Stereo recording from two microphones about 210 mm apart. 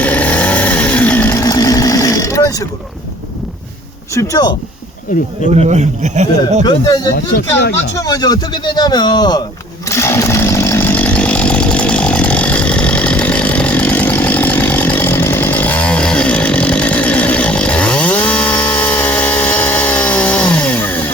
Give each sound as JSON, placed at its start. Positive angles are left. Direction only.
{"t": 0.0, "sound": "chainsaw", "side_deg": 10}
{"t": 4.1, "sound": "speech", "side_deg": 15}
{"t": 5.5, "sound": "a man's voice", "side_deg": -30}
{"t": 6.7, "sound": "speech", "side_deg": 20}
{"t": 9.9, "sound": "chainsaw", "side_deg": 15}